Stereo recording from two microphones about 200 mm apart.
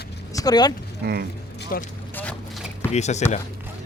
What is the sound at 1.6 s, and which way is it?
Vehicle, 45° left (ahead or behind).